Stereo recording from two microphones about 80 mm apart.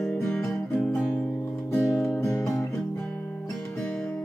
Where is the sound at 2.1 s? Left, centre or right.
Left.